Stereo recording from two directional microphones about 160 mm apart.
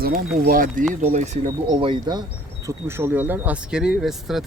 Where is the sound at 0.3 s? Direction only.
60° right (ahead or behind).